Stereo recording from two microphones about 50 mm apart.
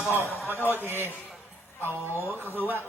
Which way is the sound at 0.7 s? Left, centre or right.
Right.